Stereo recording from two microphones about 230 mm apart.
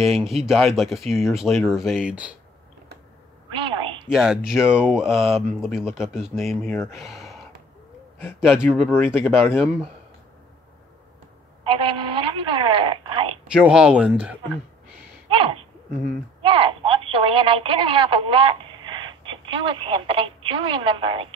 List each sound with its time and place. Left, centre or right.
0.0 s speech: centre
3.5 s a sound: right
4.1 s speech: centre
5.0 s speech: centre
5.3 s speech: centre
6.6 s speech: centre
7.0 s a sound: centre
8.5 s speech: centre
11.6 s telephone: right
13.5 s speech: centre
15.2 s owl: right
16.4 s speech: right